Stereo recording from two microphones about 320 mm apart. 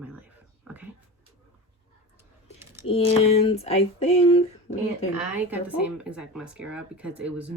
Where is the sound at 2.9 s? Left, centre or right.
Centre.